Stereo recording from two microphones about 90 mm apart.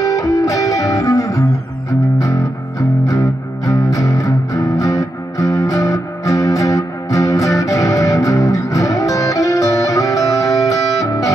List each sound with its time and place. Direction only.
0.0 s music: 40° left (ahead or behind)